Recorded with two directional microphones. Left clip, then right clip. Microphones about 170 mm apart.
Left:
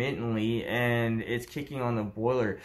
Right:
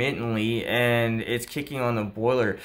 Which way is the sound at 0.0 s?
30° right (ahead or behind).